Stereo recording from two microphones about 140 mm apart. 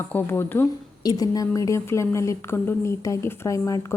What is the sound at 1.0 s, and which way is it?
A woman's voice, 25° left (ahead or behind).